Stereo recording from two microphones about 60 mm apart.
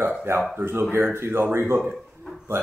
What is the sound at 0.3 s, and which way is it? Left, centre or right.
Speech, right.